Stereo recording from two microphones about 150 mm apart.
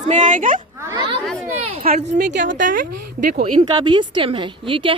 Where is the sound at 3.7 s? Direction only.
30° right (ahead or behind).